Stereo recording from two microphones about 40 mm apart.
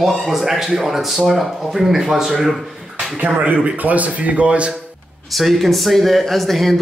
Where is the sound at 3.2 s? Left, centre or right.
Right.